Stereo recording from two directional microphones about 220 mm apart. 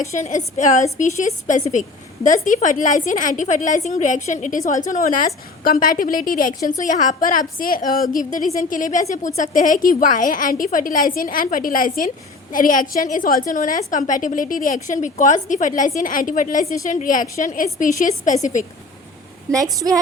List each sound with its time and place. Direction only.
0.0 s a woman's voice: 30° left (ahead or behind)
19.5 s a woman's voice: 15° right (ahead or behind)